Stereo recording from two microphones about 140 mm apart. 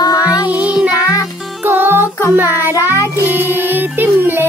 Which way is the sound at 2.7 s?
25° left (ahead or behind).